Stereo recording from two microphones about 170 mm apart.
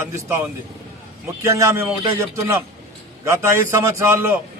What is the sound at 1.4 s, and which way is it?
A man's voice, 15° right (ahead or behind).